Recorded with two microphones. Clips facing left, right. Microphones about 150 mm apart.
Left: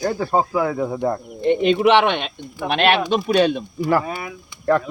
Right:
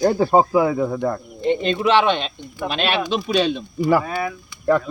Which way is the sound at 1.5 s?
65° left (ahead or behind).